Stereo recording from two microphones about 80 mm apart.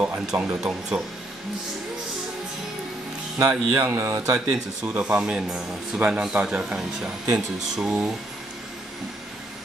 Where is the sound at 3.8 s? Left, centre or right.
Right.